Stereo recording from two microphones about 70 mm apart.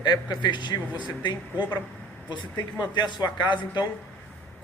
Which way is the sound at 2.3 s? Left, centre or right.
Left.